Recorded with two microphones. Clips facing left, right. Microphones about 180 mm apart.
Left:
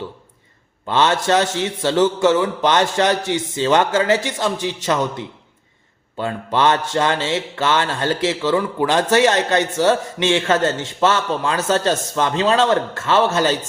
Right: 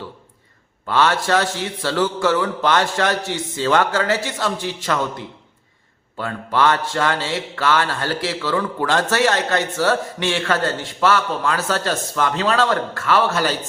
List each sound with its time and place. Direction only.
0.9 s mantra: 20° left (ahead or behind)